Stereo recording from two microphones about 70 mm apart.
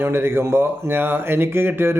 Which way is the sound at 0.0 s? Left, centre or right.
Right.